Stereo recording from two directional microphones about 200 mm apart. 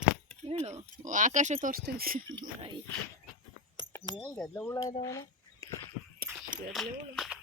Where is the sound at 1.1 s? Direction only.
40° right (ahead or behind).